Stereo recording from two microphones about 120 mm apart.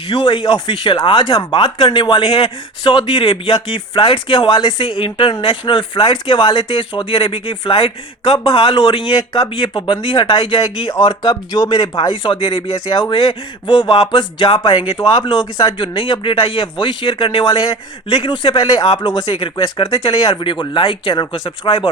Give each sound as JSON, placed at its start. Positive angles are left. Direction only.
{"t": 0.1, "sound": "speech", "side_deg": 45}
{"t": 12.2, "sound": "speech", "side_deg": 50}